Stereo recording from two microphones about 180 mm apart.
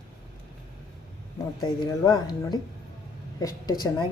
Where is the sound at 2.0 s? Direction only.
25° left (ahead or behind).